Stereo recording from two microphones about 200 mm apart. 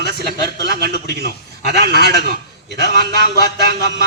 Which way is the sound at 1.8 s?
55° right (ahead or behind).